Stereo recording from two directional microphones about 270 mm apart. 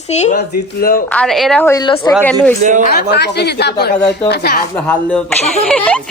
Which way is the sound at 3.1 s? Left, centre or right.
Left.